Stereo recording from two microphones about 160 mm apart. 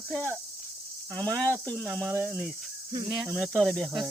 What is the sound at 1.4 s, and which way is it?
Speech, 20° right (ahead or behind).